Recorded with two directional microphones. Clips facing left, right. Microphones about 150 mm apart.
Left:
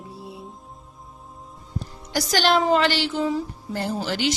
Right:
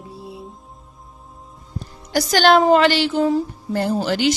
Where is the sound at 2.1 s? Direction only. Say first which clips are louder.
Right 6 dB; 55° right (ahead or behind).